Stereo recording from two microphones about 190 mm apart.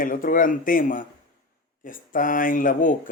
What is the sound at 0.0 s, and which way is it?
Speech, 45° left (ahead or behind).